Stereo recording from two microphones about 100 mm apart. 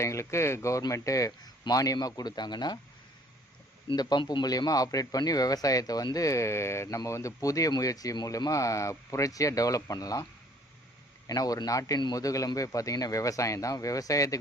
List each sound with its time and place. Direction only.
0.0 s speech: 30° left (ahead or behind); by 2.7 s 45° left (ahead or behind)
4.2 s speech: 50° left (ahead or behind)
11.3 s speech: 40° left (ahead or behind)